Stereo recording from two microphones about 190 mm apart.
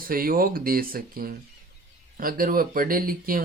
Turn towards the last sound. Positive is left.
turn(degrees=-50)  # may be behind; listen again after turning